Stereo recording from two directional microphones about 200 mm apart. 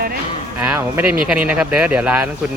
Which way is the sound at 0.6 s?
10° right (ahead or behind).